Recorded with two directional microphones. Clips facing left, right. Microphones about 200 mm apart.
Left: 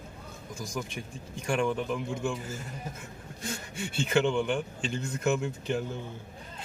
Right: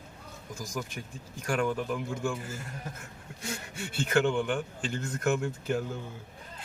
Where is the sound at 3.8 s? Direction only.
5° right (ahead or behind).